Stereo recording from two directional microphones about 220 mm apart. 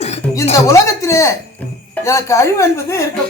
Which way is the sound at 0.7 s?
15° left (ahead or behind).